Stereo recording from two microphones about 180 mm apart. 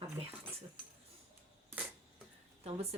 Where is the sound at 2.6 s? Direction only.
35° right (ahead or behind).